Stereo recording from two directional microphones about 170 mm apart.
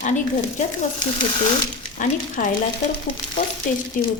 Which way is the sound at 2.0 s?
50° left (ahead or behind).